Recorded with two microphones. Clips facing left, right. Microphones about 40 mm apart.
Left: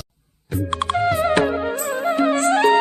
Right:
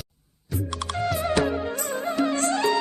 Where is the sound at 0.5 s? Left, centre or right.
Left.